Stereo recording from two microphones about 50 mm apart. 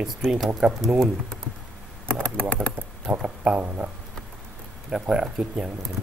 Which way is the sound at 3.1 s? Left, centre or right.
Centre.